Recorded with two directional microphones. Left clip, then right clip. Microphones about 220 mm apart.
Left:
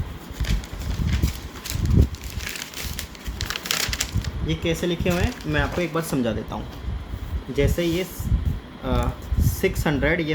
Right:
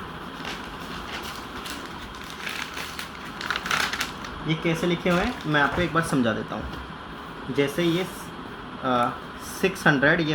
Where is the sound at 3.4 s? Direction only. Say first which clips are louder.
Right 1 dB; 45° left (ahead or behind).